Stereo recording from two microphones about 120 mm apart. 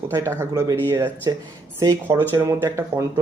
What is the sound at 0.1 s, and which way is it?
Speech, 25° right (ahead or behind).